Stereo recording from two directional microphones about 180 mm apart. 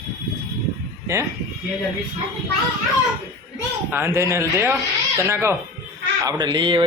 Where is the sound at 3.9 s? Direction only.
15° right (ahead or behind).